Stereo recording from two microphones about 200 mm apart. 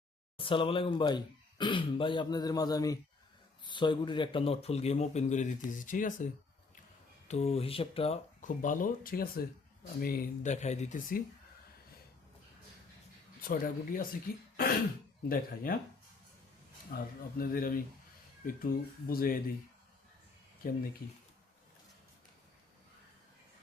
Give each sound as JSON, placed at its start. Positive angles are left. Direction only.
{"t": 0.3, "sound": "speech", "side_deg": 25}
{"t": 7.3, "sound": "speech", "side_deg": 30}
{"t": 13.4, "sound": "speech", "side_deg": 45}
{"t": 16.9, "sound": "speech", "side_deg": 45}